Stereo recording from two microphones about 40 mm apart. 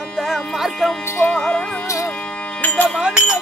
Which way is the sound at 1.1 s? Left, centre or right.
Left.